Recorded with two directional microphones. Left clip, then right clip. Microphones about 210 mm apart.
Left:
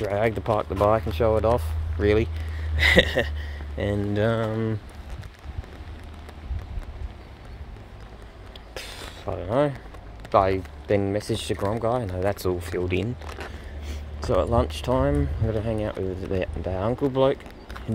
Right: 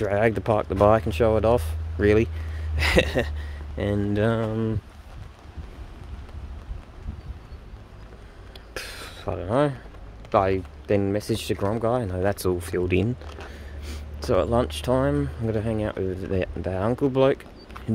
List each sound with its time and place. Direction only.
0.0 s speech: 40° right (ahead or behind)
2.8 s speech: 30° right (ahead or behind)
8.7 s a sound: 45° right (ahead or behind)
10.3 s speech: 30° right (ahead or behind); by 13.1 s 50° right (ahead or behind)
13.8 s speech: 40° right (ahead or behind)